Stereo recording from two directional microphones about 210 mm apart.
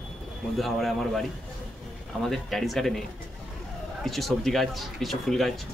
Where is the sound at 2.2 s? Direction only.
Centre (ahead or behind).